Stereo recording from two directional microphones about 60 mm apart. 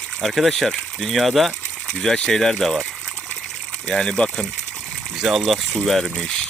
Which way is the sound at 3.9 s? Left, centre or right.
Centre.